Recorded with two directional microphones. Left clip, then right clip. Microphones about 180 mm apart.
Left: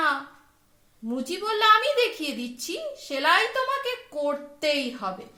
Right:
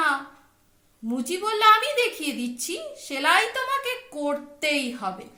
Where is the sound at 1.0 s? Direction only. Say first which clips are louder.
Right 2 dB; 50° left (ahead or behind).